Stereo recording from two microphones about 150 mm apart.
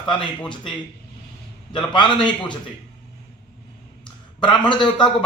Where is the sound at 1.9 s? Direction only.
30° left (ahead or behind).